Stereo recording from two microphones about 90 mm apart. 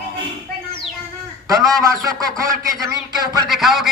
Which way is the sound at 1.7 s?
40° right (ahead or behind).